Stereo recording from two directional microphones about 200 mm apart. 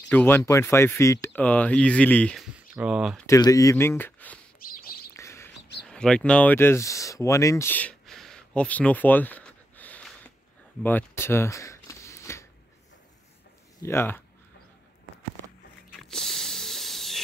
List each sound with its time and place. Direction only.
0.1 s speech: 10° left (ahead or behind)
2.5 s speech: 5° right (ahead or behind)
3.3 s speech: 15° left (ahead or behind)
4.6 s bird: 50° left (ahead or behind)
5.1 s bird: 15° left (ahead or behind)
5.9 s a sound: 5° left (ahead or behind)
13.7 s speech: 10° left (ahead or behind)
16.0 s hiss: centre (ahead or behind)